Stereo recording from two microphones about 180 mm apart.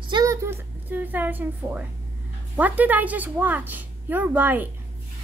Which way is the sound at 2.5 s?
10° right (ahead or behind).